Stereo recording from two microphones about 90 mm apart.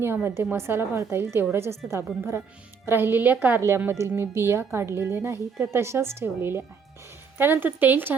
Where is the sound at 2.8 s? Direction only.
25° right (ahead or behind).